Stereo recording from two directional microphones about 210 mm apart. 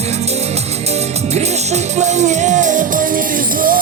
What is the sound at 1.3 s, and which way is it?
Music, 35° right (ahead or behind).